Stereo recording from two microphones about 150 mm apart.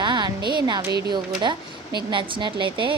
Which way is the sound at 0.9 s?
90° right.